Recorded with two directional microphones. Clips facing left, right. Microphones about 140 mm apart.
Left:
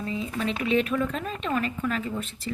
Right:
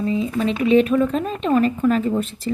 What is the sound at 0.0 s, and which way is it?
Speech, 25° right (ahead or behind).